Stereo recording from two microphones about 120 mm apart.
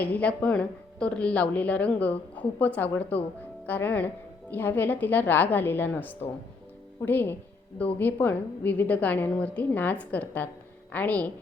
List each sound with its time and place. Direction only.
0.0 s speech: 10° left (ahead or behind)